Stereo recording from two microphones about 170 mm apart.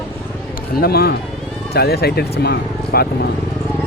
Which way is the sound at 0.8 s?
65° left (ahead or behind).